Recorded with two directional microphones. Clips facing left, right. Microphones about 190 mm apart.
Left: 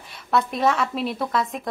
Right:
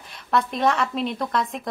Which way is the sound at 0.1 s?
Centre (ahead or behind).